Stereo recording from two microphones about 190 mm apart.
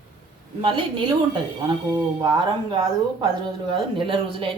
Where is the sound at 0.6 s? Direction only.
25° right (ahead or behind).